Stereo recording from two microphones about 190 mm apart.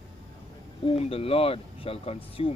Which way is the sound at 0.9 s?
30° left (ahead or behind).